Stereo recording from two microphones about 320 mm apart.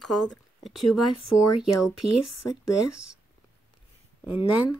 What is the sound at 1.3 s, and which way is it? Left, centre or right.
Speech, left.